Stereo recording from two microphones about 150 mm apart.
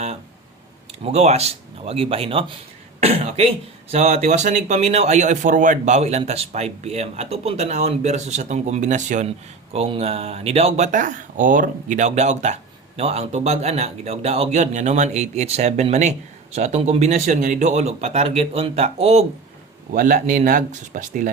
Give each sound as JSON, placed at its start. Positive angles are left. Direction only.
{"t": 1.0, "sound": "speech", "side_deg": -45}
{"t": 9.7, "sound": "speech", "side_deg": -40}
{"t": 19.9, "sound": "speech", "side_deg": -60}